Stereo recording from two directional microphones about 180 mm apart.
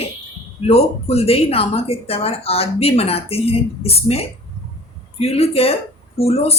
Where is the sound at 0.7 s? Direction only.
35° left (ahead or behind).